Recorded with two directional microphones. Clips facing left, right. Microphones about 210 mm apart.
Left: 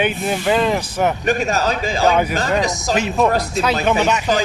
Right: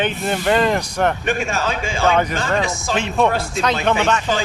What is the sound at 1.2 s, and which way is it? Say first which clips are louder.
Speech: left 3 dB; 40° left (ahead or behind).